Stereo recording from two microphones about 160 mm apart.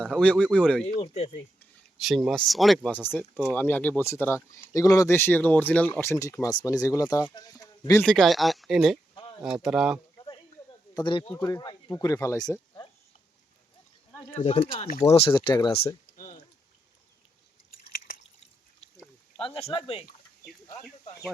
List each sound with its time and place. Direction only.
0.0 s speech: 5° left (ahead or behind)
1.0 s speech: 40° left (ahead or behind)
2.0 s speech: centre (ahead or behind)
3.2 s speech: 10° left (ahead or behind)
8.0 s speech: centre (ahead or behind)
10.9 s speech: 30° left (ahead or behind)
11.3 s speech: 15° left (ahead or behind)
14.3 s speech: 40° left (ahead or behind)
16.1 s a sound: 60° left (ahead or behind)
19.4 s speech: 35° left (ahead or behind)